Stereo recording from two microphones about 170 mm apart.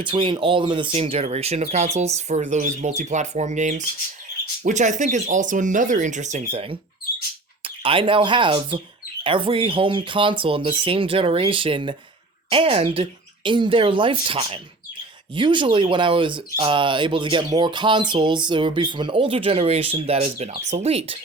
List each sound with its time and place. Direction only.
0.0 s speech: 30° right (ahead or behind)